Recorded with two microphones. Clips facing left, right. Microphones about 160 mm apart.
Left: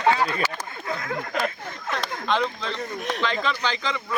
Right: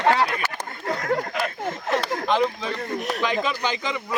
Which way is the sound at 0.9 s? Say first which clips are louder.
Right 5 dB; 40° right (ahead or behind).